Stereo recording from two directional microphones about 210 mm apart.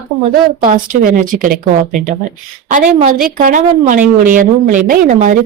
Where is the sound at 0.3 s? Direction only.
40° right (ahead or behind).